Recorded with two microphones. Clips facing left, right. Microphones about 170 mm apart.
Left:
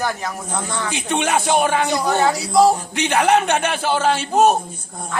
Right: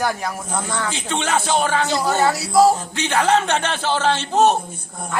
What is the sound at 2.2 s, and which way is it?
Speech, 5° right (ahead or behind).